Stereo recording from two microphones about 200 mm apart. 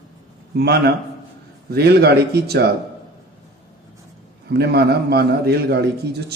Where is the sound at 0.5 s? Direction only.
55° right (ahead or behind).